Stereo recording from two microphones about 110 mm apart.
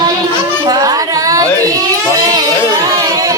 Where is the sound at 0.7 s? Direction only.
35° right (ahead or behind).